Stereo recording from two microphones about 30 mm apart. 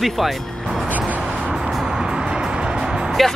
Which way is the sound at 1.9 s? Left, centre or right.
Right.